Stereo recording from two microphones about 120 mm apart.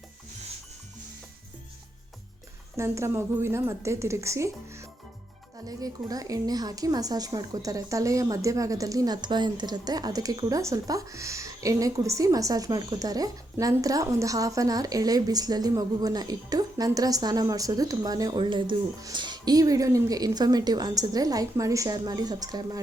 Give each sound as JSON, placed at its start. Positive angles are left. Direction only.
{"t": 2.7, "sound": "a woman's voice", "side_deg": -25}